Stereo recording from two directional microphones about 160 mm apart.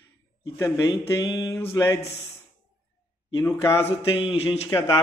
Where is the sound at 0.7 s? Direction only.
25° left (ahead or behind).